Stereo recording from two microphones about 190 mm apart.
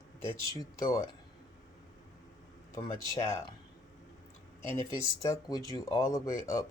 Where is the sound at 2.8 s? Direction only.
15° left (ahead or behind).